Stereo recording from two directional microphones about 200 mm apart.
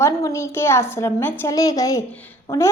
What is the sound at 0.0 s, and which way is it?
A woman's voice, 15° left (ahead or behind).